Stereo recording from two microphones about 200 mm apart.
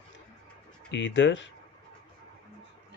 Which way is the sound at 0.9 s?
65° left (ahead or behind).